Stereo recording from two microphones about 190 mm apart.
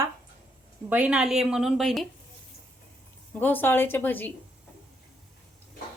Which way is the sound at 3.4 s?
10° left (ahead or behind).